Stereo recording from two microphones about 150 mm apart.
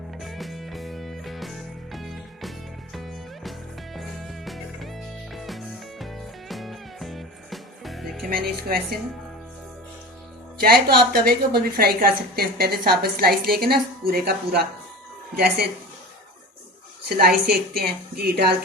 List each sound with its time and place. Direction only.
0.2 s music: centre (ahead or behind)
8.3 s a woman's voice: 90° right
10.6 s a woman's voice: 90° right
17.2 s a woman's voice: 90° right